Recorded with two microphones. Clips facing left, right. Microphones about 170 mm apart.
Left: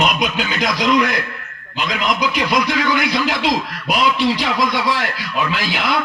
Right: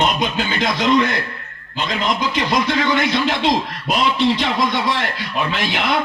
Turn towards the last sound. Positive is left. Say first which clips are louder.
# even
turn(degrees=-25)  # may be behind; listen again after turning